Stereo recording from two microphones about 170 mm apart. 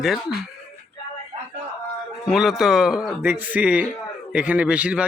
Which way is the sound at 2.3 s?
Centre (ahead or behind).